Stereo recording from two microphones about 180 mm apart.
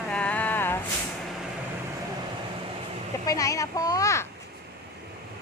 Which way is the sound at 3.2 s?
20° left (ahead or behind).